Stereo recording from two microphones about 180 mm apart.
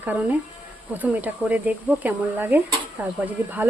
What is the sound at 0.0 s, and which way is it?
Speech, 10° right (ahead or behind).